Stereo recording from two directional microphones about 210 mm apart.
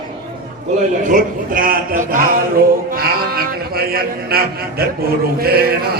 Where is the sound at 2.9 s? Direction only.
45° right (ahead or behind).